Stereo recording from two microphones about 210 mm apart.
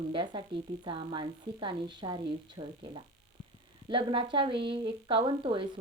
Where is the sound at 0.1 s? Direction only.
25° right (ahead or behind).